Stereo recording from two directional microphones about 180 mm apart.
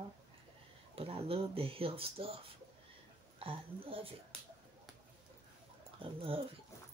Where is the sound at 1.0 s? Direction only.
30° right (ahead or behind).